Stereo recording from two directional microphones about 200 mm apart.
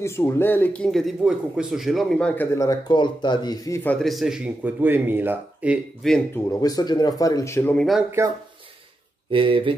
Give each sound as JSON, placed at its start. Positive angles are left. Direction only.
{"t": 0.0, "sound": "speech", "side_deg": 15}
{"t": 6.6, "sound": "speech", "side_deg": 20}
{"t": 9.3, "sound": "speech", "side_deg": -25}